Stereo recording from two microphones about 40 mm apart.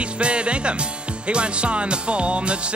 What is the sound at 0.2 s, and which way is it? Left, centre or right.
Music, right.